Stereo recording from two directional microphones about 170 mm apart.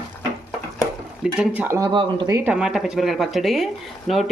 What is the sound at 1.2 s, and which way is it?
Speech, 10° right (ahead or behind).